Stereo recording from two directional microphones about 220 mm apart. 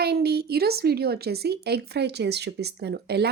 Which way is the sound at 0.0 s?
45° right (ahead or behind).